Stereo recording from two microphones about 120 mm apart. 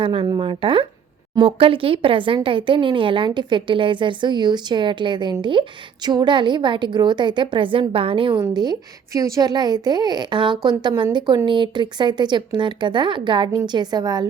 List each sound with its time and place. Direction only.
0.0 s a woman's voice: 50° right (ahead or behind)
8.4 s a woman's voice: 35° right (ahead or behind)